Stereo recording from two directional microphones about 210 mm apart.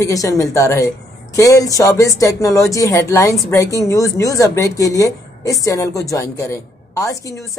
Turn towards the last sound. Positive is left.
turn(degrees=15)  # may be behind; listen again after turning